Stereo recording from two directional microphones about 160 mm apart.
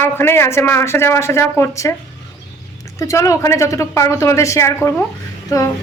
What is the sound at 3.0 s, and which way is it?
A woman's voice, 20° left (ahead or behind).